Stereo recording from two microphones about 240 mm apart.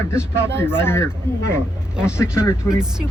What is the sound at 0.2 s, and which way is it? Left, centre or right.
Speech, centre.